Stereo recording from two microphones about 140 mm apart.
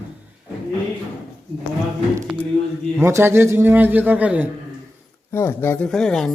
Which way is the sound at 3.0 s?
15° right (ahead or behind).